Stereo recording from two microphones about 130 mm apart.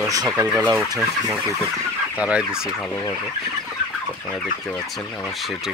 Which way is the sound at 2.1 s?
10° right (ahead or behind).